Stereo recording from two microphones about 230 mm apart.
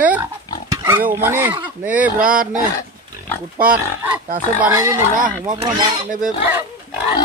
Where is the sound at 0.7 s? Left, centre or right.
Centre.